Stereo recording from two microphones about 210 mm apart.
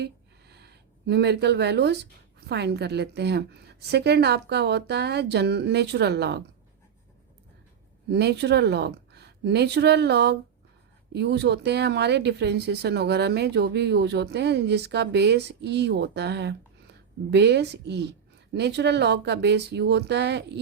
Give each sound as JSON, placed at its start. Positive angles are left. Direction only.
{"t": 0.0, "sound": "a sound", "side_deg": -50}
{"t": 2.5, "sound": "speech", "side_deg": -55}
{"t": 8.1, "sound": "speech", "side_deg": -55}